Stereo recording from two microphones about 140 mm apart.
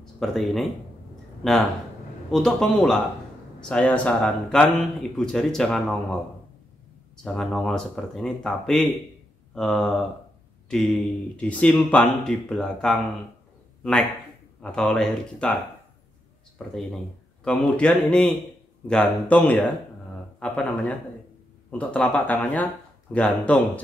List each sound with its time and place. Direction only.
0.0 s speech: centre (ahead or behind)
7.2 s speech: 5° left (ahead or behind)
14.6 s speech: 5° left (ahead or behind)
16.5 s speech: centre (ahead or behind)